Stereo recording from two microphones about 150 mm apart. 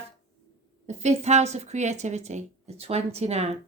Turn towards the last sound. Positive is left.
turn(degrees=-45)  # may be behind; listen again after turning